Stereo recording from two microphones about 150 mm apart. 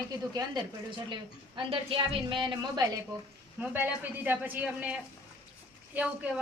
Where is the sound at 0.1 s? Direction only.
30° right (ahead or behind).